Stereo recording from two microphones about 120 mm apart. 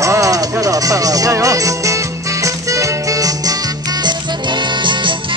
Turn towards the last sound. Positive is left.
turn(degrees=-40)  # may be behind; listen again after turning